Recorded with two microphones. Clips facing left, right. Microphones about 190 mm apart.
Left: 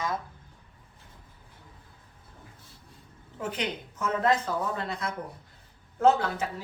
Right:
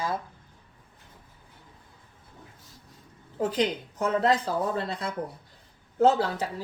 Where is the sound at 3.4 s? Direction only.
35° right (ahead or behind).